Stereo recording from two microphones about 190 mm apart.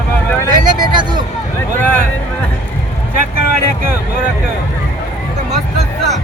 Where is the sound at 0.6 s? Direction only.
25° right (ahead or behind).